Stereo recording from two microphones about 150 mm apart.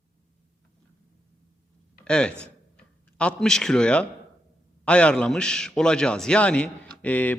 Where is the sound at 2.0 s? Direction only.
5° left (ahead or behind).